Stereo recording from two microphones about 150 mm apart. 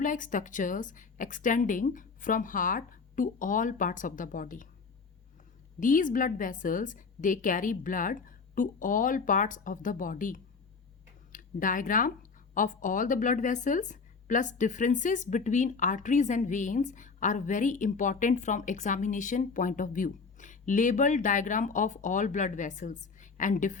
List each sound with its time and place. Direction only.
0.0 s speech: 60° left (ahead or behind)
5.8 s speech: 60° left (ahead or behind)